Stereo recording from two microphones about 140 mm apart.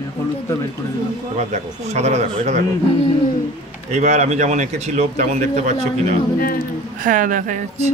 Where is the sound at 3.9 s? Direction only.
55° right (ahead or behind).